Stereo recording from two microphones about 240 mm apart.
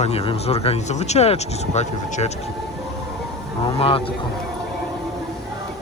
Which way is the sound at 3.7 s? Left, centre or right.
Left.